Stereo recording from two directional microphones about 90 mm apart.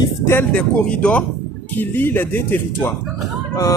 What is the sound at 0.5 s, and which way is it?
Speech, 15° left (ahead or behind).